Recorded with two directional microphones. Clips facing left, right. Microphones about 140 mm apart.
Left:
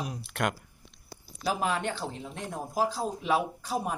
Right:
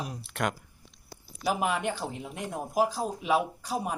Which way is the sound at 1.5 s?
15° right (ahead or behind).